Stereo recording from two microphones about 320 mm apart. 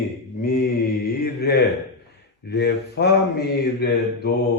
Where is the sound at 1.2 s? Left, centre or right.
Left.